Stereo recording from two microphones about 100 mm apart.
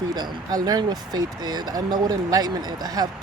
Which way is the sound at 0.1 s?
45° right (ahead or behind).